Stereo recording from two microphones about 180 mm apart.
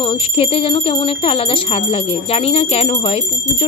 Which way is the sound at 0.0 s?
30° left (ahead or behind).